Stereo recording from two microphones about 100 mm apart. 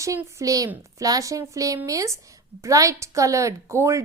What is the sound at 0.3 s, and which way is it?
A woman's voice, 30° right (ahead or behind).